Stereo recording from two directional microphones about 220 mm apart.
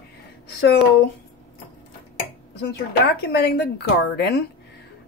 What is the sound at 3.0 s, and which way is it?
Speech, 50° left (ahead or behind).